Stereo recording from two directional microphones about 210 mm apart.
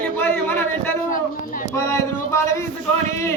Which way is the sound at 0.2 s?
10° left (ahead or behind).